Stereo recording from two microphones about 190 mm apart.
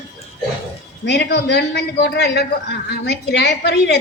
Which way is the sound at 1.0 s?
65° left (ahead or behind).